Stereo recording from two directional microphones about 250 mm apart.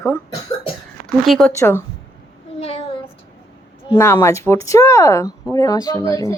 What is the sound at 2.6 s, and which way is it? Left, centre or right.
Child singing, left.